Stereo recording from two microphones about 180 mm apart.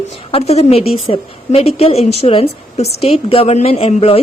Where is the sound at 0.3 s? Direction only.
35° left (ahead or behind).